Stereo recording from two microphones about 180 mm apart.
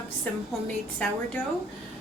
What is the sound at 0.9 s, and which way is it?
Speech, 5° left (ahead or behind).